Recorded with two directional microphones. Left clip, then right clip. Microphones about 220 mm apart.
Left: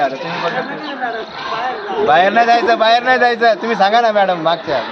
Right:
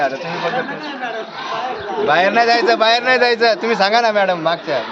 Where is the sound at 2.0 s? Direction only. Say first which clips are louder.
Left 2 dB; 20° right (ahead or behind); by 4.7 s centre (ahead or behind).